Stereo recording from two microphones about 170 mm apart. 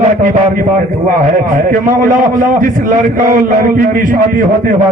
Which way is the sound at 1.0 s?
50° right (ahead or behind).